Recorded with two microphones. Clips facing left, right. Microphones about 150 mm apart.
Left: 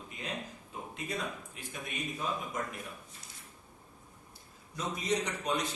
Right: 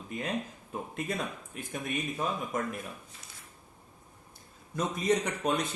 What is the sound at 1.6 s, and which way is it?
Speech, 50° right (ahead or behind).